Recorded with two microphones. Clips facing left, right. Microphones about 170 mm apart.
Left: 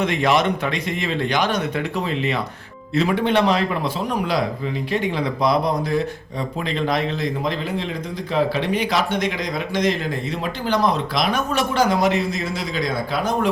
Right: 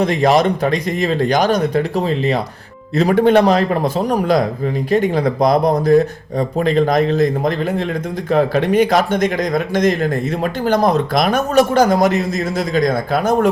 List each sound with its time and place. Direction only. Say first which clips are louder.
0.0 s speech: right 5 dB; 40° right (ahead or behind)